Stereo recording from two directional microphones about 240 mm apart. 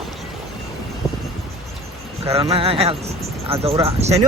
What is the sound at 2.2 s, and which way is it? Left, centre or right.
Speech, right.